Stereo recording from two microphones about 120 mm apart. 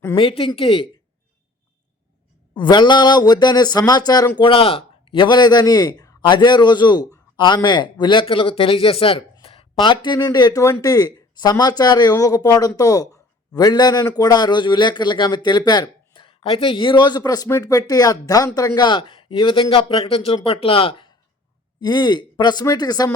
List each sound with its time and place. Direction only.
0.2 s speech: 50° left (ahead or behind)
2.6 s speech: 40° left (ahead or behind)
4.4 s speech: 45° left (ahead or behind)